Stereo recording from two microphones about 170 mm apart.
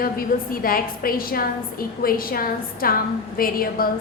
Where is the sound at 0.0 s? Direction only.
60° left (ahead or behind).